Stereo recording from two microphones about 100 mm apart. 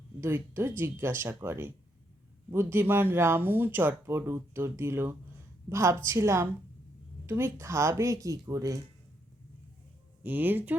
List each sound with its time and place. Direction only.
0.2 s speech: 25° right (ahead or behind)
10.2 s speech: 20° right (ahead or behind)